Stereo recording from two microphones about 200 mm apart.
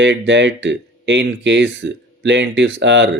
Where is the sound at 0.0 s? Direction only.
60° right (ahead or behind).